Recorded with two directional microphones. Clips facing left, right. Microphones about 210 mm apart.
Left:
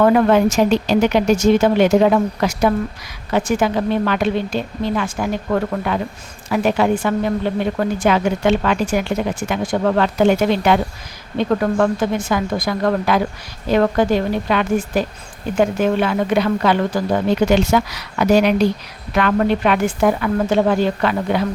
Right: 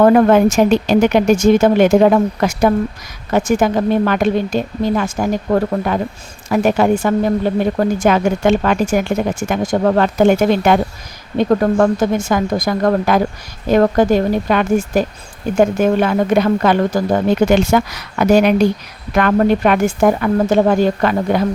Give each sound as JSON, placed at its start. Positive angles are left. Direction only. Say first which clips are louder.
{"t": 0.0, "sound": "a woman's voice", "louder": "right 3 dB", "side_deg": -45}